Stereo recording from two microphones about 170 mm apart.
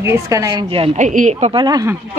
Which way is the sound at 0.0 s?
15° right (ahead or behind).